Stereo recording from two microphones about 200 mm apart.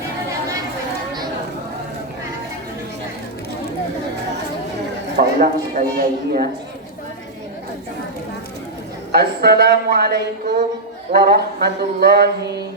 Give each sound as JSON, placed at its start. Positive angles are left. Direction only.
{"t": 5.2, "sound": "speech", "side_deg": -50}
{"t": 9.1, "sound": "speech", "side_deg": -55}